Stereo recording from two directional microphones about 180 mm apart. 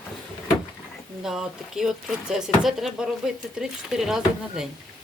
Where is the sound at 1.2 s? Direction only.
Centre (ahead or behind).